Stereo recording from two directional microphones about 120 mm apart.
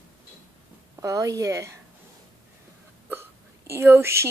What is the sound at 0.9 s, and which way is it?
Speech, 30° right (ahead or behind).